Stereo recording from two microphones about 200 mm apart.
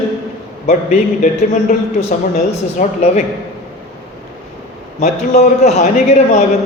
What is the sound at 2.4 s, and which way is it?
Speech, 35° left (ahead or behind).